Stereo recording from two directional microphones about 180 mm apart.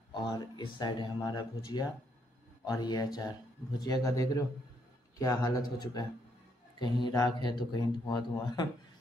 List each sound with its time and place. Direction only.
0.1 s speech: 25° left (ahead or behind)